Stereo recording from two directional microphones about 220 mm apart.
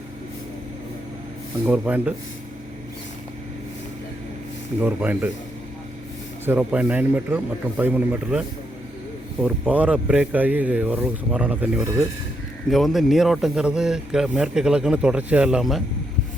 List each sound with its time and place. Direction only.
1.6 s speech: 5° right (ahead or behind)
4.8 s speech: 10° right (ahead or behind)
6.4 s a man's voice: 10° right (ahead or behind)